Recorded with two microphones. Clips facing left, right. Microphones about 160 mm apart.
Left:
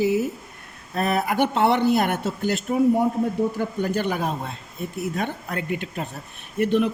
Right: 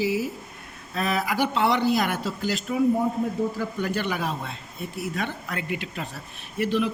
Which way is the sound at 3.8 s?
45° left (ahead or behind).